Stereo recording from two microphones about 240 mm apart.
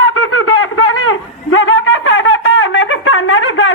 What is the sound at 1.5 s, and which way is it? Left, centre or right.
Wind instrument, left.